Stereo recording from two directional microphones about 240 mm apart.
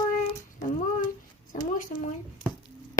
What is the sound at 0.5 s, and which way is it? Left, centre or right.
A child's voice, left.